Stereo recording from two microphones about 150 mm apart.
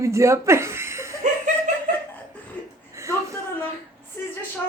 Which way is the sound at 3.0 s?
20° right (ahead or behind).